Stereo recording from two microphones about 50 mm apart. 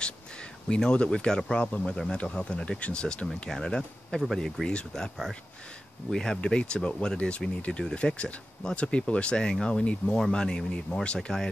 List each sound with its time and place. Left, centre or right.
0.8 s a man's voice: centre
4.4 s speech: centre
4.6 s a man's voice: centre
6.1 s a man's voice: centre